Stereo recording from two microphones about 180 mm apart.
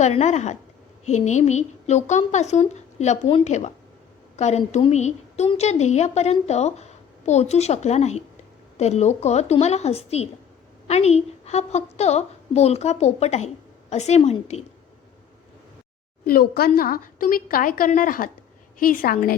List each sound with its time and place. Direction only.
0.0 s a woman's voice: 40° left (ahead or behind)
16.2 s a woman's voice: 55° left (ahead or behind)